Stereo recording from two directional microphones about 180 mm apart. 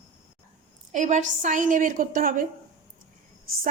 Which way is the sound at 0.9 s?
40° right (ahead or behind).